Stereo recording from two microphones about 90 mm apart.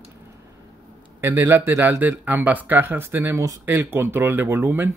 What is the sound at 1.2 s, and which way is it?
Speech, 25° right (ahead or behind).